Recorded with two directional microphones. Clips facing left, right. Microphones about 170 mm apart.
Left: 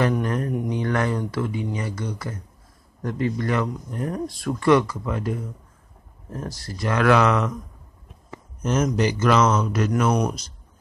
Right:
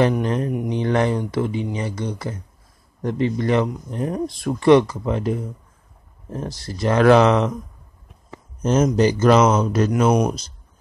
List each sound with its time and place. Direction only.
0.2 s speech: 20° right (ahead or behind)
8.6 s speech: 30° right (ahead or behind)